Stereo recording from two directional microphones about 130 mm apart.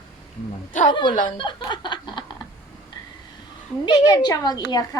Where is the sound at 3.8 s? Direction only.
35° left (ahead or behind).